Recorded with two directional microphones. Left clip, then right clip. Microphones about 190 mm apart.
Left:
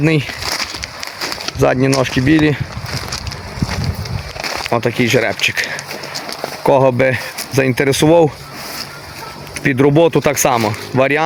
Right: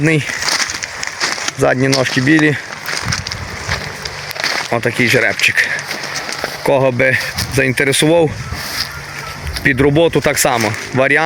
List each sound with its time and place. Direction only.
0.0 s speech: 10° left (ahead or behind)
1.5 s speech: 10° left (ahead or behind)
4.7 s speech: 15° left (ahead or behind)
9.6 s speech: 15° left (ahead or behind)